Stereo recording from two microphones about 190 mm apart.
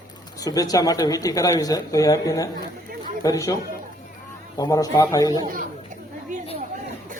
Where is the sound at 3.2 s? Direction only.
15° left (ahead or behind).